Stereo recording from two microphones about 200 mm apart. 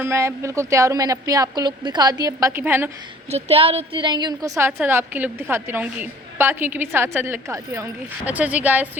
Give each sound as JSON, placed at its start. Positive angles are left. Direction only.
{"t": 0.0, "sound": "a woman's voice", "side_deg": -15}
{"t": 3.2, "sound": "a woman's voice", "side_deg": -30}